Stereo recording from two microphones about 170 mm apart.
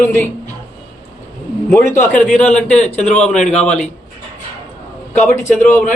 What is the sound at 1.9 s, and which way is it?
Speech, 50° left (ahead or behind).